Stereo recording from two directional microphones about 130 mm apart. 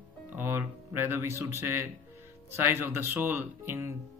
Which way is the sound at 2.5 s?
15° right (ahead or behind).